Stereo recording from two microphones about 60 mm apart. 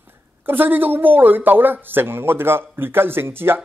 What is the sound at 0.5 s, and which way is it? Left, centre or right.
Speech, right.